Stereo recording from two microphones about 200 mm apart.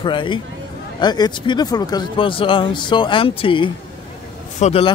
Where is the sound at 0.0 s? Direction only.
25° left (ahead or behind).